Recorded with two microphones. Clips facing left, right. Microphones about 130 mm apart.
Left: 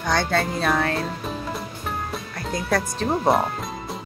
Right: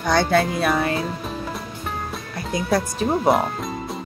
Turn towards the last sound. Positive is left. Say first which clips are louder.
# right 2 dB
turn(degrees=0)  # may be behind; listen again after turning